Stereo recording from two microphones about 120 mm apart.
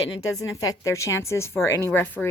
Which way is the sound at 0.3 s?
30° left (ahead or behind).